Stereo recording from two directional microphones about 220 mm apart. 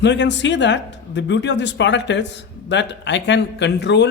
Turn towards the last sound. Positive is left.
turn(degrees=50)  # may be behind; listen again after turning